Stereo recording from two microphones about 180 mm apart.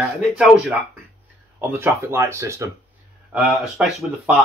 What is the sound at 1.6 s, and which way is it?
Speech, 10° right (ahead or behind).